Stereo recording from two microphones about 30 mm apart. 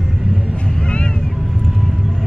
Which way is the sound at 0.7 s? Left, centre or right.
Left.